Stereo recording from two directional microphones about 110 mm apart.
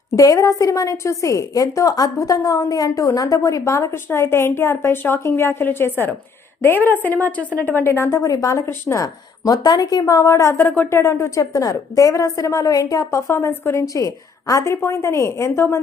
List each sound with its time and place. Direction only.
0.2 s a woman's voice: 30° left (ahead or behind)